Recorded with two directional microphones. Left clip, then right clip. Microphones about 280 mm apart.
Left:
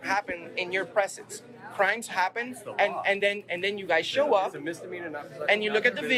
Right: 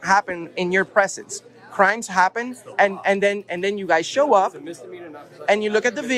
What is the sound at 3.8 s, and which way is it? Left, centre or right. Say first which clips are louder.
A man's voice: right 7 dB; right.